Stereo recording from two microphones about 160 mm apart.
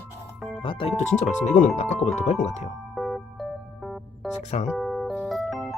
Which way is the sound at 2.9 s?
Centre (ahead or behind).